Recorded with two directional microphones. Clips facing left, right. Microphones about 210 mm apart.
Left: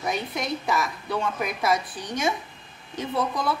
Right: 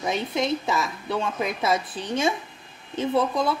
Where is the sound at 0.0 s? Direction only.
25° right (ahead or behind).